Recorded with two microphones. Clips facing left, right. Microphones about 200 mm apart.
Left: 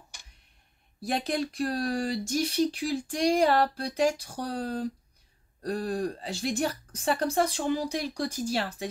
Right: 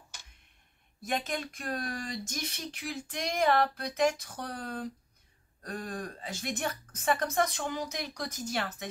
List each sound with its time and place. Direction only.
1.0 s speech: 35° left (ahead or behind)